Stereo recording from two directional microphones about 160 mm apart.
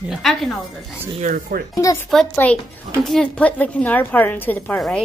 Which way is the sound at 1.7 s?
20° left (ahead or behind).